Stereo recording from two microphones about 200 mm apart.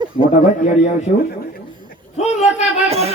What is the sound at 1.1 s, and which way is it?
Speech, 45° left (ahead or behind).